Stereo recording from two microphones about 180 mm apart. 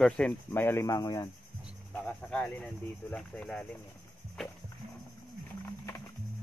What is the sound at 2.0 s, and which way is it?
Speech, 5° left (ahead or behind).